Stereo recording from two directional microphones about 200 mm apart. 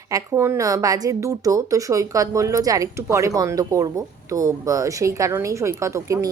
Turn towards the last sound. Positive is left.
turn(degrees=-15)  # may be behind; listen again after turning